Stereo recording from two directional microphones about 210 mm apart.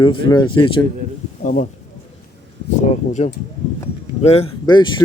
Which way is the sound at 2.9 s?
35° left (ahead or behind).